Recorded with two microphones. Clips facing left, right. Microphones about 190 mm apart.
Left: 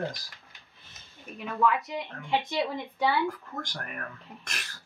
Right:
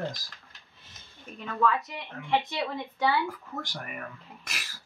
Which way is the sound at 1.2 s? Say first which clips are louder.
Left 1 dB; 10° left (ahead or behind).